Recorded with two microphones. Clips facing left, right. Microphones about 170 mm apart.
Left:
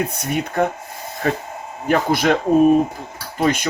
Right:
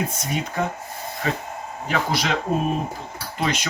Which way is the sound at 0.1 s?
60° left (ahead or behind).